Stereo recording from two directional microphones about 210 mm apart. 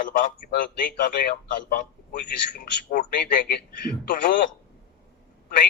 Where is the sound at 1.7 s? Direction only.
40° left (ahead or behind).